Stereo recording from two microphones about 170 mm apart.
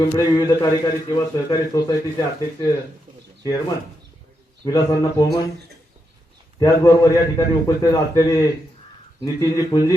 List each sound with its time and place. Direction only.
0.0 s a man's voice: 20° left (ahead or behind)
4.6 s a man's voice: 20° left (ahead or behind)
6.6 s a man's voice: 20° left (ahead or behind)